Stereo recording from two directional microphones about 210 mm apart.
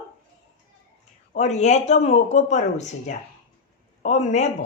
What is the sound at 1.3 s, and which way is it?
A woman's voice, 35° left (ahead or behind).